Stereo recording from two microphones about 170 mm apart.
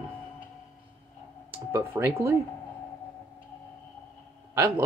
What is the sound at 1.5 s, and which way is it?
Speech, 15° right (ahead or behind).